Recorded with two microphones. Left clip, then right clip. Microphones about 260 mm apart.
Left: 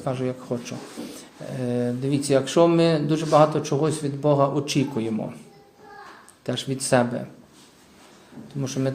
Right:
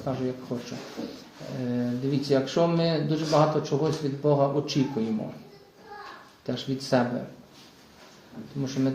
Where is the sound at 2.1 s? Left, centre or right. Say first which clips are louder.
Left 5 dB; left.